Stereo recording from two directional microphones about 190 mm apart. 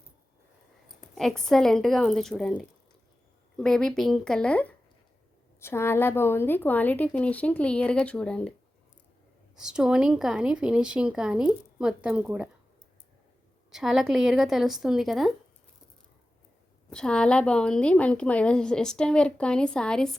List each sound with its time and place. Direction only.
1.0 s a woman's voice: centre (ahead or behind)
9.6 s a woman's voice: 5° right (ahead or behind)
13.7 s a woman's voice: centre (ahead or behind)
16.9 s a woman's voice: 5° left (ahead or behind)